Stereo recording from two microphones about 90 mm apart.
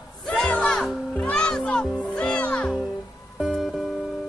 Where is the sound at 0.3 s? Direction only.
10° left (ahead or behind).